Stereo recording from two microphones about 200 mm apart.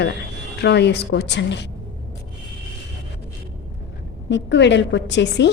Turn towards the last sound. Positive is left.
turn(degrees=60)  # may be behind; listen again after turning